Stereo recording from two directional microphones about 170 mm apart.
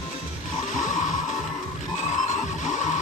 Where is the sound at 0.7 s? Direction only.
50° left (ahead or behind).